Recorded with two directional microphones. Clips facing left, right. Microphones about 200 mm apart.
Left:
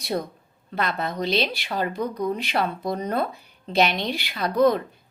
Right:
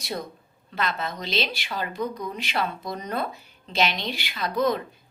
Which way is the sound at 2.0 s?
35° left (ahead or behind).